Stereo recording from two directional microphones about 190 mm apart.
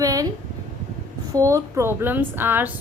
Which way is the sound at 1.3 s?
15° right (ahead or behind).